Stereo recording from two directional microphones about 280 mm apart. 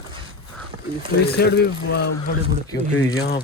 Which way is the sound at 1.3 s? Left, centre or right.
Left.